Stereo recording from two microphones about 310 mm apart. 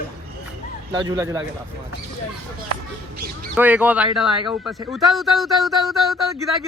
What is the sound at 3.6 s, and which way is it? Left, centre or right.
Speech, centre.